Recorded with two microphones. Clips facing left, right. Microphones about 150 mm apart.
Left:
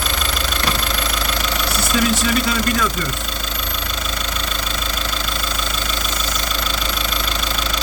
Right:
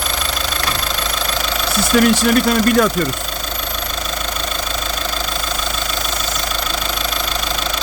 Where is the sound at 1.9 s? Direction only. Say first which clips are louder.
Right 6 dB; 60° right (ahead or behind).